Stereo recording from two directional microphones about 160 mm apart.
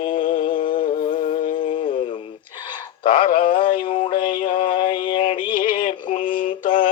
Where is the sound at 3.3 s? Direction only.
60° left (ahead or behind).